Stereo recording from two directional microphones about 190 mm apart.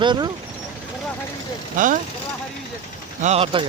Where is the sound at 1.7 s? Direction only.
45° right (ahead or behind).